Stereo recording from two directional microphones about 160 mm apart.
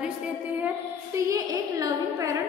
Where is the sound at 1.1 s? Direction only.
20° right (ahead or behind).